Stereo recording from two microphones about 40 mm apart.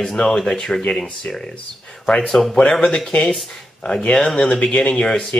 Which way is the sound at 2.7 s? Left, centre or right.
Left.